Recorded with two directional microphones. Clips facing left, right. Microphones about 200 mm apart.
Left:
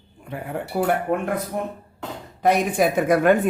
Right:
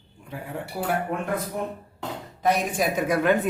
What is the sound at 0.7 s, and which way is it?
Speech, 55° left (ahead or behind).